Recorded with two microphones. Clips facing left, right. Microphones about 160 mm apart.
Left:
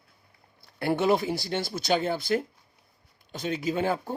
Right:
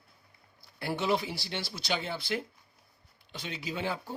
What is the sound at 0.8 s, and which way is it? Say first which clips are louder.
Speech: left 6 dB; 55° left (ahead or behind).